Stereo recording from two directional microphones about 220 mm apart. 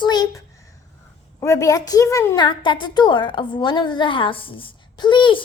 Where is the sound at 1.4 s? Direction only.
15° left (ahead or behind).